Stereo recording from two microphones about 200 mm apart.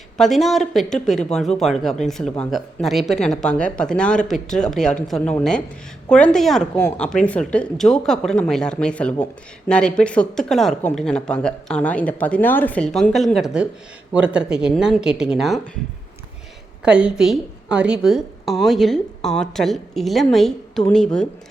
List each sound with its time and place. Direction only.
0.2 s speech: centre (ahead or behind)
16.8 s speech: 5° right (ahead or behind)